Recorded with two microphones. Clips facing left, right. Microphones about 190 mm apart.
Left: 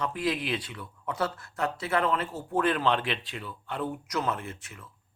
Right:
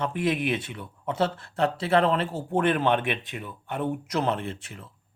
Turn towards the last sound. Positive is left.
turn(degrees=-30)  # may be behind; listen again after turning